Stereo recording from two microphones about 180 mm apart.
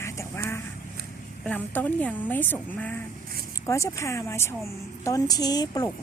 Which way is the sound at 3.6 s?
15° left (ahead or behind).